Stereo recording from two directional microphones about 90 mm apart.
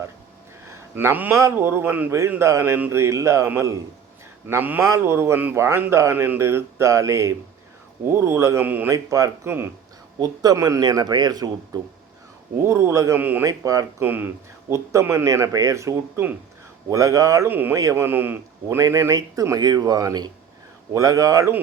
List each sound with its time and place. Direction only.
0.7 s a sound: 25° right (ahead or behind)
1.4 s a man's voice: 30° right (ahead or behind)
8.6 s a man's voice: 20° right (ahead or behind)
8.9 s a man's voice: 35° right (ahead or behind)
12.6 s a man's voice: 30° right (ahead or behind)
13.1 s a man's voice: 20° right (ahead or behind)
13.4 s a man's voice: 40° right (ahead or behind)
14.0 s a man's voice: 20° right (ahead or behind); by 17.5 s 35° right (ahead or behind)
17.5 s a man's voice: 20° right (ahead or behind)
17.7 s a man's voice: 35° right (ahead or behind)
18.0 s a man's voice: 20° right (ahead or behind)
18.8 s a man's voice: 35° right (ahead or behind)